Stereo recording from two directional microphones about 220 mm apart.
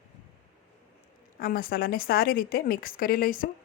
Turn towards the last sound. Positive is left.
turn(degrees=40)  # may be behind; listen again after turning